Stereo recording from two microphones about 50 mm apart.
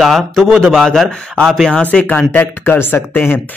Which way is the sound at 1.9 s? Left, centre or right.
Left.